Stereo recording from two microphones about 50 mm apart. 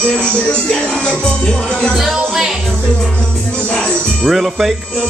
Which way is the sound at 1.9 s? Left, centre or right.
Centre.